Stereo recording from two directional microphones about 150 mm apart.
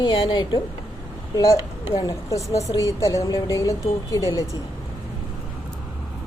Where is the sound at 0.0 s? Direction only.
35° left (ahead or behind).